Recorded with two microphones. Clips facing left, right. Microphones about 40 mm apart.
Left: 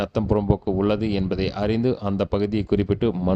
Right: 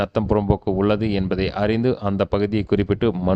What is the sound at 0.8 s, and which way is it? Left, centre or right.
Speech, centre.